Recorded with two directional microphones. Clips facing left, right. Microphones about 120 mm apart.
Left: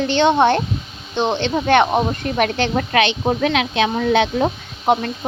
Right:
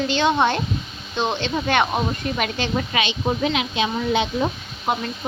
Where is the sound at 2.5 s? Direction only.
65° left (ahead or behind).